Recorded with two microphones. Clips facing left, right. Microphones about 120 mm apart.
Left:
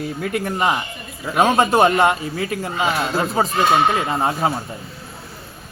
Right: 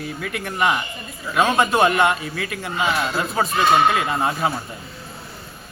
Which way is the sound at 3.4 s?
20° left (ahead or behind).